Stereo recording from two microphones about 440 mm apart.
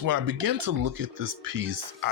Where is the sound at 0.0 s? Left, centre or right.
Right.